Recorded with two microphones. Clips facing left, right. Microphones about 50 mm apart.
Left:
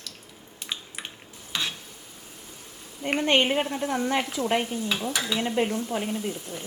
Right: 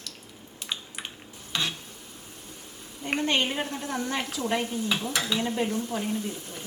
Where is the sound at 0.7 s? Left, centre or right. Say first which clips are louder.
Even; centre.